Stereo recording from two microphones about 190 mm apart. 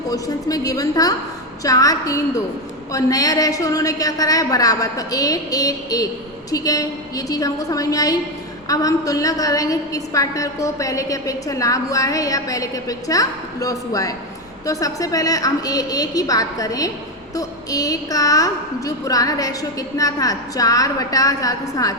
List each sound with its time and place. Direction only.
0.1 s a woman's voice: 20° left (ahead or behind)